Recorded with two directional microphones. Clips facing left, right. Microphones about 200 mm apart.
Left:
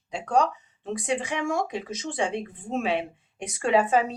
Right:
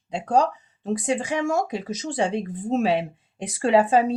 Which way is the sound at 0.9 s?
40° right (ahead or behind).